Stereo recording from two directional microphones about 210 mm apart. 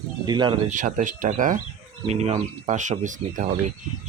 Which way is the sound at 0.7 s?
35° right (ahead or behind).